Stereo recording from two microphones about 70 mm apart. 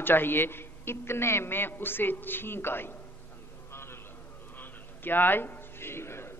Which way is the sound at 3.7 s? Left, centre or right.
Left.